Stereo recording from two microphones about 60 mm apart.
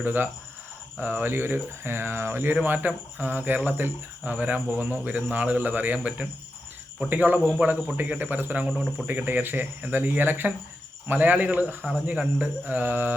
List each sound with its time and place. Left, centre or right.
0.0 s speech: right
7.1 s speech: right
8.7 s speech: centre
9.0 s speech: right